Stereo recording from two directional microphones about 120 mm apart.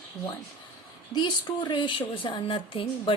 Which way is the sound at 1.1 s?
35° left (ahead or behind).